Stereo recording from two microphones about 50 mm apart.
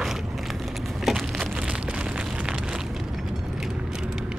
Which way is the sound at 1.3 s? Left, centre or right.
Centre.